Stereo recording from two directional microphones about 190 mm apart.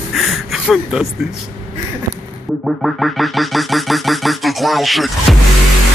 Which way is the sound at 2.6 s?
Centre (ahead or behind).